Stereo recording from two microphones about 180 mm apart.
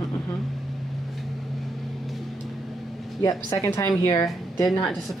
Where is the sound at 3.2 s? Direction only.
20° left (ahead or behind).